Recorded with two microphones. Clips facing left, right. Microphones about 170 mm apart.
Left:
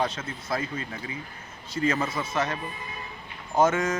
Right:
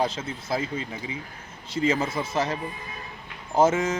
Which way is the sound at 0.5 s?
20° right (ahead or behind).